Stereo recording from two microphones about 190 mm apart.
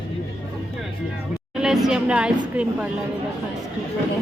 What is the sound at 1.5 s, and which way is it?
Speech, centre (ahead or behind).